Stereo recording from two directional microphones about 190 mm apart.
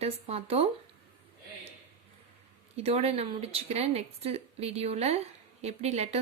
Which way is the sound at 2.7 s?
30° right (ahead or behind).